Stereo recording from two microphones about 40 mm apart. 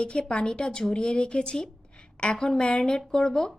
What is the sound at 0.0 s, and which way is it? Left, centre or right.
Speech, left.